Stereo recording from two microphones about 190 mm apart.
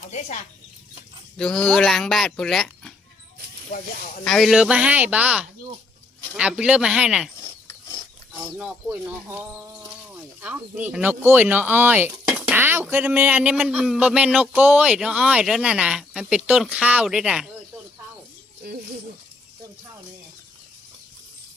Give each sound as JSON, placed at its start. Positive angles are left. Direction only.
{"t": 0.1, "sound": "speech", "side_deg": 40}
{"t": 1.4, "sound": "speech", "side_deg": 5}
{"t": 4.2, "sound": "speech", "side_deg": 0}
{"t": 8.5, "sound": "speech", "side_deg": -10}
{"t": 18.6, "sound": "speech", "side_deg": -55}